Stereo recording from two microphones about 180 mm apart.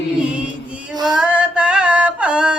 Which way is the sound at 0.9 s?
20° right (ahead or behind).